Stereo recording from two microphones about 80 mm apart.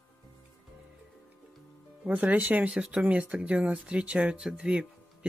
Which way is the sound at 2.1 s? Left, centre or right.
Right.